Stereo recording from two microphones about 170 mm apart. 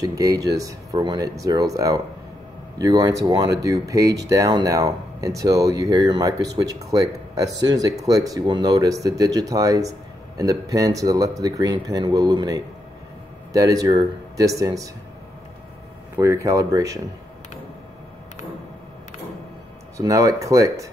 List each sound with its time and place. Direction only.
0.0 s speech: 20° right (ahead or behind)
16.2 s speech: 20° right (ahead or behind)
20.0 s speech: 20° right (ahead or behind)